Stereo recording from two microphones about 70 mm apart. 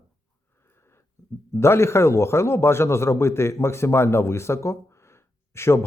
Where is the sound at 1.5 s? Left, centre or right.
Left.